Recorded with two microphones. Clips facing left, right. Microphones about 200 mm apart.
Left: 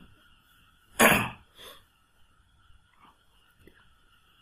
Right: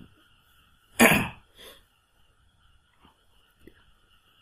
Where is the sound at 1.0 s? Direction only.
15° right (ahead or behind).